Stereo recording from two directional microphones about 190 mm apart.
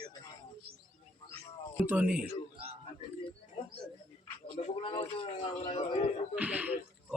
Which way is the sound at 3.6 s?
25° left (ahead or behind).